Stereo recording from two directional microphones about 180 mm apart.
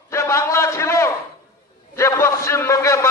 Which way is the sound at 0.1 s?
15° left (ahead or behind).